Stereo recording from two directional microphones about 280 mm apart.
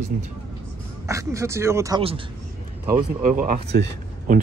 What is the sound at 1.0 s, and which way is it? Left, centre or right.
Speech, centre.